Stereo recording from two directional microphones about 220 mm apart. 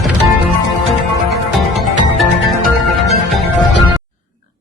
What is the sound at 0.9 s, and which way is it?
Music, centre (ahead or behind).